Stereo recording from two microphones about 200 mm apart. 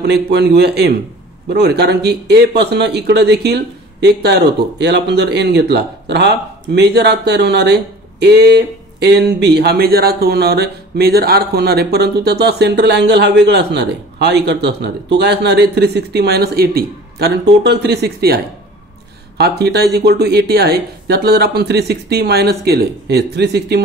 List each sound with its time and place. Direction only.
0.0 s speech: 55° right (ahead or behind)